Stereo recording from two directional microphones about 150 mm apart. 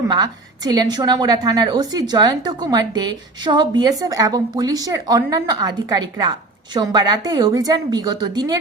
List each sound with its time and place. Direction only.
0.1 s a woman's voice: 25° right (ahead or behind)